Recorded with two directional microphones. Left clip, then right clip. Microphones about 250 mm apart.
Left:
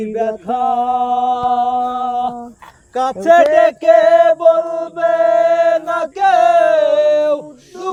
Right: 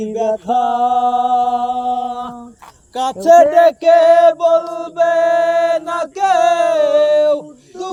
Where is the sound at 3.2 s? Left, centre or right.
Right.